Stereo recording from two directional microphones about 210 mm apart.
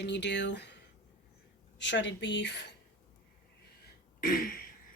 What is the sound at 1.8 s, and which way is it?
Speech, 60° left (ahead or behind).